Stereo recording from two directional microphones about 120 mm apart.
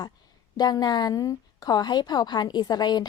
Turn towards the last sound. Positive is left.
turn(degrees=35)  # may be behind; listen again after turning